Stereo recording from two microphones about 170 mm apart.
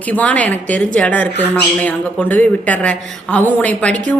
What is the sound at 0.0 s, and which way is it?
Speech, 10° left (ahead or behind).